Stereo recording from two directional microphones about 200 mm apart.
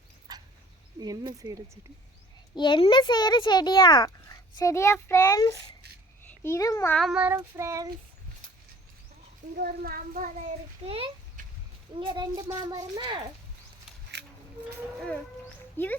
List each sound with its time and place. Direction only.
0.3 s dog: 20° right (ahead or behind)
0.9 s a child's voice: 20° right (ahead or behind)
2.6 s a child's voice: 25° left (ahead or behind)
7.0 s child singing: 5° right (ahead or behind)
9.6 s a child's voice: 50° right (ahead or behind)
10.8 s a child's voice: 30° right (ahead or behind)
14.1 s a sound: 60° right (ahead or behind)
15.8 s a child's voice: 10° left (ahead or behind)